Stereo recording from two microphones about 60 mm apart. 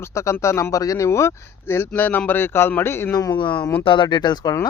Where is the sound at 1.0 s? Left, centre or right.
Left.